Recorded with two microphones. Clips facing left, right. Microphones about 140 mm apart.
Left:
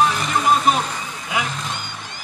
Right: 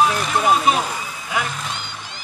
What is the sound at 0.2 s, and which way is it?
Music, centre (ahead or behind).